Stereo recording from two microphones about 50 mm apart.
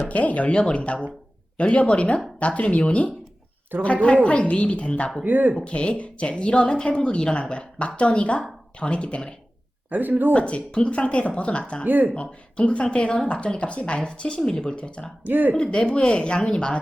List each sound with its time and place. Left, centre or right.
0.1 s a woman's voice: left
5.2 s speech: right
5.5 s a woman's voice: left
9.9 s speech: right
10.3 s a woman's voice: left
11.9 s speech: right
12.1 s a woman's voice: left
15.2 s speech: right
15.5 s a woman's voice: centre